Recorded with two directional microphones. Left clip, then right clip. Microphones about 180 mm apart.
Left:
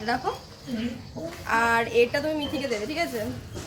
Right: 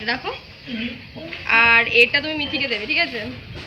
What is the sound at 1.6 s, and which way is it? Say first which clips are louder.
Speech: right 8 dB; 30° left (ahead or behind).